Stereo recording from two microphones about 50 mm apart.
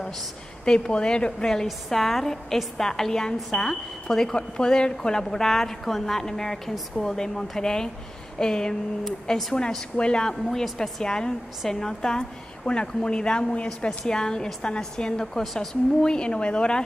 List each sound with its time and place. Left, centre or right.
0.7 s speech: centre
15.4 s speech: centre
16.0 s speech: centre